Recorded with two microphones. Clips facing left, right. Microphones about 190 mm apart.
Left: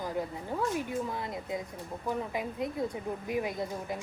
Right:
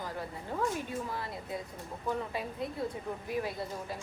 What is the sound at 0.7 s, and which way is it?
A woman's voice, 20° left (ahead or behind).